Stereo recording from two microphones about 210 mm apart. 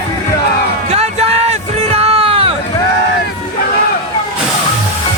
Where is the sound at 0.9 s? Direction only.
30° right (ahead or behind).